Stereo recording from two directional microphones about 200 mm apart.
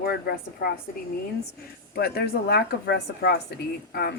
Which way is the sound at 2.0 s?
50° left (ahead or behind).